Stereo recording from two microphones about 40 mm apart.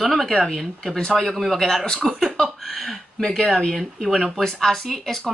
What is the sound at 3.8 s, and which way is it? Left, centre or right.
Speech, centre.